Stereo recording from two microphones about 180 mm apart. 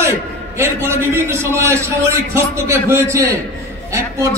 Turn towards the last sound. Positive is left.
turn(degrees=-15)  # may be behind; listen again after turning